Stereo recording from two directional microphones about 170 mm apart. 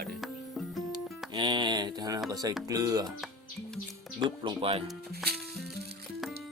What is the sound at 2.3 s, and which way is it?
Speech, 20° right (ahead or behind).